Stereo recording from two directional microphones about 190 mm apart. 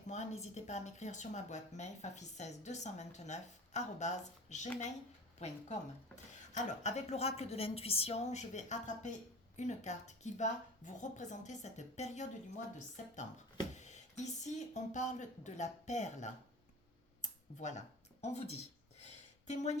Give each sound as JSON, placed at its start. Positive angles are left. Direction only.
{"t": 0.1, "sound": "a woman's voice", "side_deg": 40}
{"t": 17.2, "sound": "a sound", "side_deg": 40}
{"t": 19.5, "sound": "a woman's voice", "side_deg": 35}